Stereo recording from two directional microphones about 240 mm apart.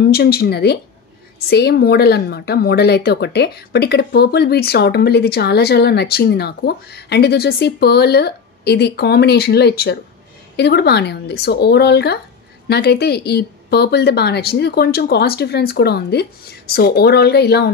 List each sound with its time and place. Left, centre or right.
0.1 s speech: left